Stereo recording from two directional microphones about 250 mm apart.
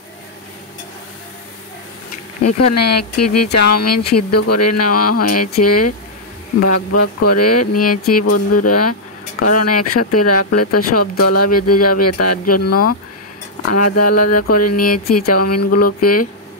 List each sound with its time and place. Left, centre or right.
2.4 s speech: left
7.8 s speech: left
8.1 s speech: left